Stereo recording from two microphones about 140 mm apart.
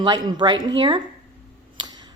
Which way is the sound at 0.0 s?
30° right (ahead or behind).